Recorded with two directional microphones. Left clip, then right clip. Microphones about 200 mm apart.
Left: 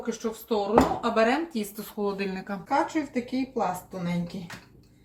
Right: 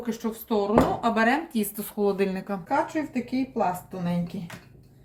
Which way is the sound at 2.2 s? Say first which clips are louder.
Right 5 dB; 30° right (ahead or behind).